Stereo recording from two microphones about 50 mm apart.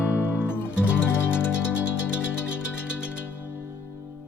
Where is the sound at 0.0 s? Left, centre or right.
Left.